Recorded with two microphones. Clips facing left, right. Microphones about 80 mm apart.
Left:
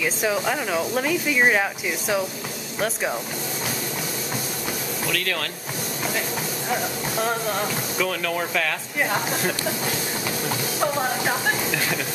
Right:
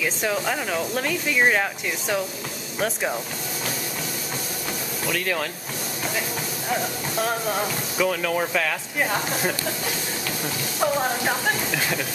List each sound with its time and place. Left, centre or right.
0.0 s speech: centre
5.1 s speech: centre
6.7 s speech: centre
10.8 s speech: centre